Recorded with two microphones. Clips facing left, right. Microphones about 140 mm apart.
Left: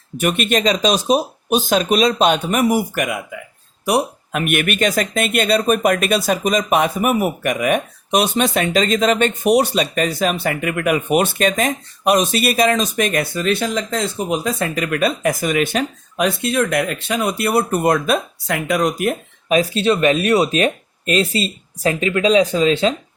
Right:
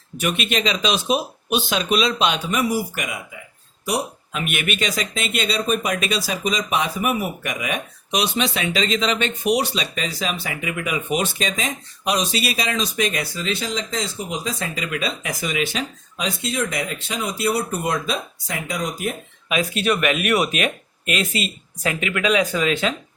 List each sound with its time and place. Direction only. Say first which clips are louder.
0.2 s speech: left 5 dB; 50° left (ahead or behind); by 19.1 s 65° left (ahead or behind)
19.5 s speech: left 5 dB; 35° left (ahead or behind)